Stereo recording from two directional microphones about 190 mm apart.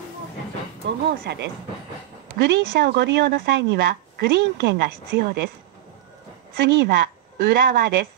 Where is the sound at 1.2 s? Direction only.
60° right (ahead or behind).